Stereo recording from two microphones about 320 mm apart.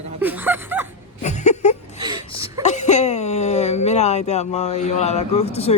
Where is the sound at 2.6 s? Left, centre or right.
Left.